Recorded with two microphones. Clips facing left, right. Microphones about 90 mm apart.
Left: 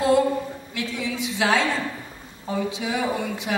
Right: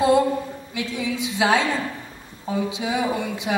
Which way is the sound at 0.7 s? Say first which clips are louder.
Right 2 dB; 15° right (ahead or behind).